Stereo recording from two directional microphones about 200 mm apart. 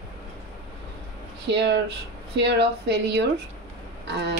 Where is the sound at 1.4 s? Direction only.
60° right (ahead or behind).